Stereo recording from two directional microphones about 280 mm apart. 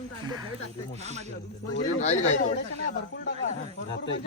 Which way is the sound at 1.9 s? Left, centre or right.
Left.